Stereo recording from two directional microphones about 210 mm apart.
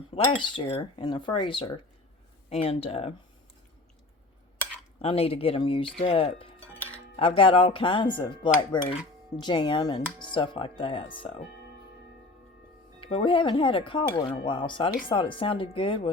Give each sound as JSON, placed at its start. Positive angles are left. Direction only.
{"t": 0.1, "sound": "speech", "side_deg": 30}
{"t": 4.9, "sound": "speech", "side_deg": 25}
{"t": 13.0, "sound": "speech", "side_deg": 25}